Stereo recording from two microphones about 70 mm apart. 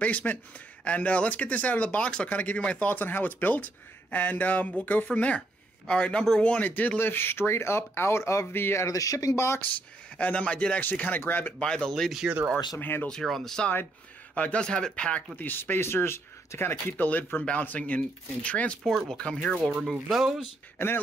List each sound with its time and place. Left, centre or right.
0.0 s speech: left
8.8 s speech: left
10.1 s speech: centre
11.6 s speech: centre
11.9 s speech: centre
12.3 s speech: centre
12.7 s speech: left
13.1 s speech: centre
14.3 s speech: centre
15.3 s speech: left; by 19.7 s centre
19.7 s speech: centre
20.7 s speech: left